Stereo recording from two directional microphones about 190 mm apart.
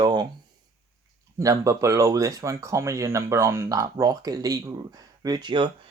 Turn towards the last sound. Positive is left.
turn(degrees=-25)  # may be behind; listen again after turning